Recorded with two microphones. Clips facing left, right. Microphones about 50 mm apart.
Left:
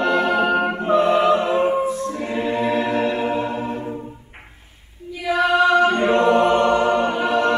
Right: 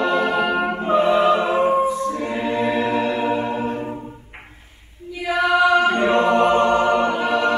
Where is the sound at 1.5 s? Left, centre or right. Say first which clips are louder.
Right 1 dB; centre.